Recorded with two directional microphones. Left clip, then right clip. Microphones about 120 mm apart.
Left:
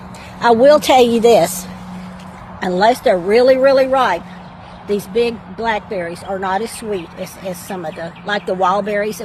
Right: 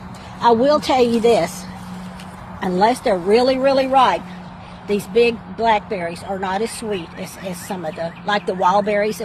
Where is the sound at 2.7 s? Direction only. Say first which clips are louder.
Left 4 dB; 40° left (ahead or behind).